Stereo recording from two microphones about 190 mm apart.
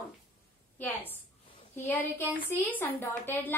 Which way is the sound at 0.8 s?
10° left (ahead or behind).